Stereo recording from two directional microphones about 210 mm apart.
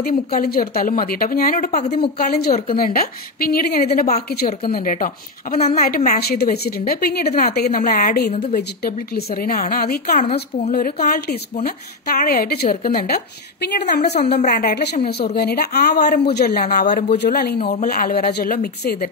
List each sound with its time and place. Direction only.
0.0 s a woman's voice: 45° left (ahead or behind)
8.5 s a woman's voice: 50° left (ahead or behind)
10.2 s a woman's voice: 30° left (ahead or behind)
10.7 s a woman's voice: 45° left (ahead or behind)
13.6 s a woman's voice: 50° left (ahead or behind)